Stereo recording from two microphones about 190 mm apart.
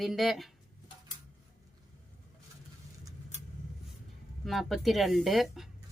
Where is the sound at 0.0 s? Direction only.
Centre (ahead or behind).